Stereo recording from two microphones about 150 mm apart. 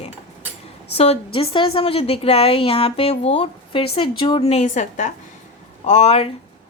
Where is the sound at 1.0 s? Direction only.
40° left (ahead or behind).